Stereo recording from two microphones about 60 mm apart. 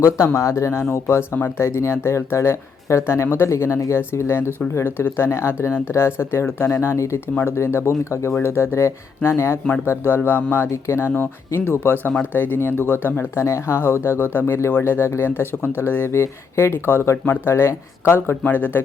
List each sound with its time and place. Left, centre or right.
0.3 s speech: left
10.7 s speech: left
12.7 s speech: right
13.0 s speech: left
13.3 s speech: left
18.4 s speech: left